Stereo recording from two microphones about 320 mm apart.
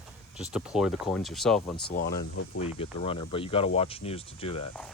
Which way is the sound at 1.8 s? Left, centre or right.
Left.